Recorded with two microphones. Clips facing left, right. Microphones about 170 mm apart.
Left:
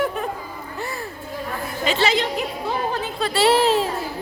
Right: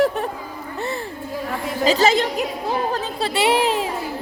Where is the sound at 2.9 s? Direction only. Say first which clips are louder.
Right 1 dB; 35° right (ahead or behind).